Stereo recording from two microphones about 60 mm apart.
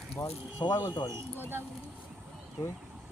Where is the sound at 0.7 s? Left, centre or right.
Left.